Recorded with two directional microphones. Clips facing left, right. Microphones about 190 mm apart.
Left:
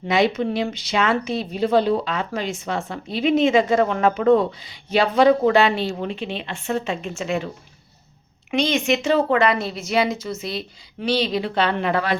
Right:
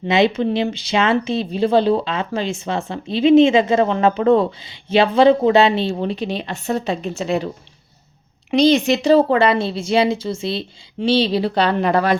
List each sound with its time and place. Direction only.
0.1 s speech: 25° right (ahead or behind)
8.4 s a woman's voice: 35° right (ahead or behind)